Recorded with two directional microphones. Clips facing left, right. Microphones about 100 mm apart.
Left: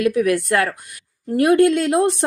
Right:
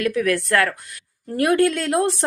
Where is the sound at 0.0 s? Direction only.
15° left (ahead or behind).